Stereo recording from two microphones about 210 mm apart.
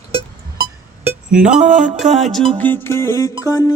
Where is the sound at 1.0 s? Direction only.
5° right (ahead or behind).